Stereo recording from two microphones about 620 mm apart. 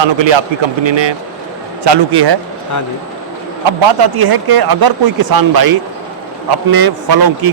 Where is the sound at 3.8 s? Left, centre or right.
Right.